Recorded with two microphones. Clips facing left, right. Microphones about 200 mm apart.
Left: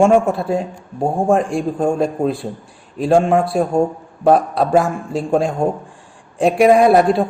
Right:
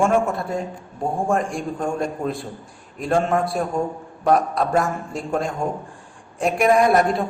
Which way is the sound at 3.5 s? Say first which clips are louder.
Left 7 dB; 30° left (ahead or behind).